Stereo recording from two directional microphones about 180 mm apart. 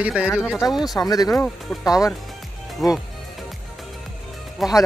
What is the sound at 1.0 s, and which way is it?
Speech, 20° left (ahead or behind).